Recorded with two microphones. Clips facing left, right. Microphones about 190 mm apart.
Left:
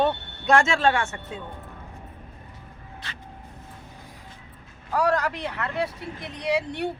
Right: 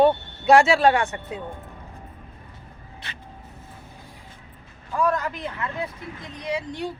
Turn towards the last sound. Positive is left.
turn(degrees=70)  # may be behind; listen again after turning